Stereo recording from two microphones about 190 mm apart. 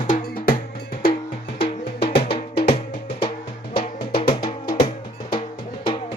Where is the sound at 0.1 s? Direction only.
50° left (ahead or behind).